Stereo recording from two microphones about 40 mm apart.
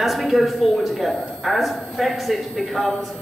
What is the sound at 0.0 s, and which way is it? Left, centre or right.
A woman's voice, centre.